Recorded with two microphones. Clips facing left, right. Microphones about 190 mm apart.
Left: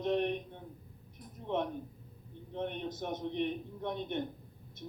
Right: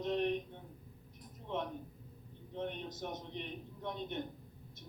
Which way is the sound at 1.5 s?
55° left (ahead or behind).